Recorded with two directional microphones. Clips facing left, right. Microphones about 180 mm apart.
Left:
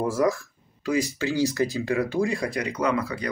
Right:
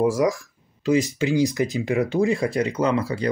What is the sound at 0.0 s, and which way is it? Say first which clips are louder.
Speech: right 3 dB; 15° right (ahead or behind).